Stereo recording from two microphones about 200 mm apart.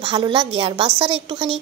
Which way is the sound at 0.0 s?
25° right (ahead or behind).